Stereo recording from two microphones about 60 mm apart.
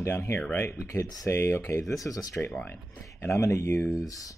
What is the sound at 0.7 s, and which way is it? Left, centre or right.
Speech, left.